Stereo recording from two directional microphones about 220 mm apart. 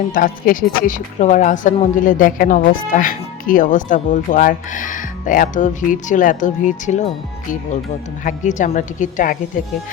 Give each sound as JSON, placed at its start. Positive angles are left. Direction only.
{"t": 0.1, "sound": "a woman's voice", "side_deg": 40}
{"t": 8.2, "sound": "a woman's voice", "side_deg": 35}